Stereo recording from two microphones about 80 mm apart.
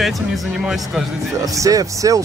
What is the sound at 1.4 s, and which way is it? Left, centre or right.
Speech, right.